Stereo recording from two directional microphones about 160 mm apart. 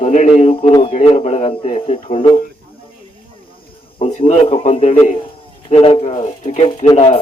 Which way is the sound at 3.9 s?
35° left (ahead or behind).